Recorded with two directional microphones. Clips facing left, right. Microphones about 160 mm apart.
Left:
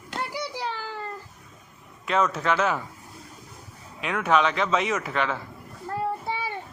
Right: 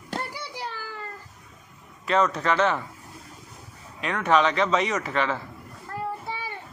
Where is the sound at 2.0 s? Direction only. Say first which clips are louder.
Right 1 dB; centre (ahead or behind).